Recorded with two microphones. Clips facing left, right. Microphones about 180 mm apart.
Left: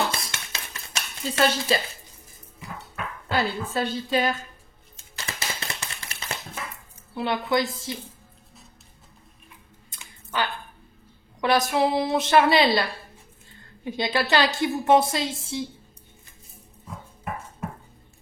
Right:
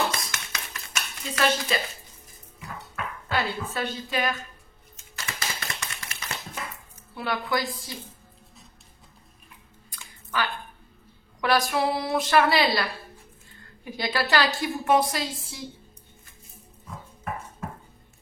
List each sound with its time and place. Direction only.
0.1 s dishes: 30° left (ahead or behind)
3.3 s a woman's voice: 30° left (ahead or behind)
4.9 s typewriter: 30° left (ahead or behind)
7.2 s a woman's voice: 20° left (ahead or behind)
9.8 s a sound: 25° left (ahead or behind)
11.4 s a woman's voice: 20° left (ahead or behind)
13.8 s a woman's voice: 25° left (ahead or behind)